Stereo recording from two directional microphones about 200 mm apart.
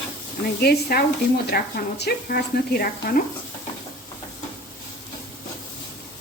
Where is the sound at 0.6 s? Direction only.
50° left (ahead or behind).